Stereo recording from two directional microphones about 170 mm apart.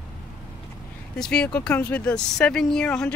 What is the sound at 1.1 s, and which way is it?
Speech, 5° left (ahead or behind).